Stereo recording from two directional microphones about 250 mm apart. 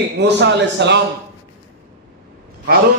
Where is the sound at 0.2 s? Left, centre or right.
Right.